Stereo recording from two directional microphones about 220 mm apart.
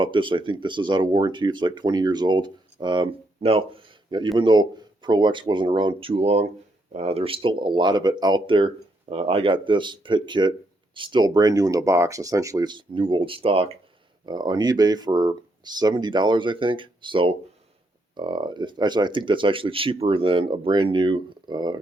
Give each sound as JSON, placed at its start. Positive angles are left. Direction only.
{"t": 0.0, "sound": "speech", "side_deg": -20}